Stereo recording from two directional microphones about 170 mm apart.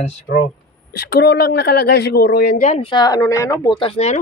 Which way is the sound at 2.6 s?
45° left (ahead or behind).